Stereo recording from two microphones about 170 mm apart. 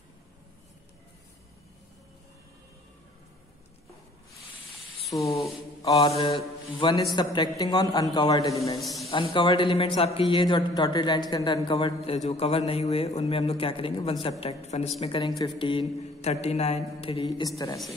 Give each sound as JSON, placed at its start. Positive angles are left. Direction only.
{"t": 5.1, "sound": "speech", "side_deg": 20}
{"t": 5.9, "sound": "a man's voice", "side_deg": 35}
{"t": 8.7, "sound": "a man's voice", "side_deg": 0}
{"t": 9.1, "sound": "a man's voice", "side_deg": 30}
{"t": 16.2, "sound": "a man's voice", "side_deg": 40}
{"t": 17.4, "sound": "speech", "side_deg": 20}